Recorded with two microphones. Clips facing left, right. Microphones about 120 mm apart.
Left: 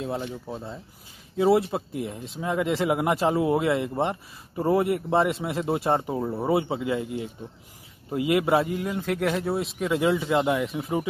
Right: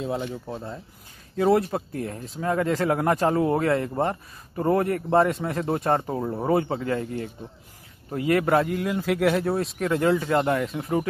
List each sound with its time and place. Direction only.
0.0 s speech: centre (ahead or behind)
6.1 s speech: centre (ahead or behind)
6.4 s speech: 10° left (ahead or behind)
8.6 s speech: centre (ahead or behind)